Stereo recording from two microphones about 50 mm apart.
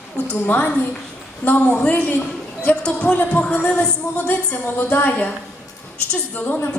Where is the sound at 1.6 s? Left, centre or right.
Left.